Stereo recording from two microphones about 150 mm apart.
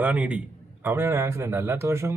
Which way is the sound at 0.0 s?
10° right (ahead or behind).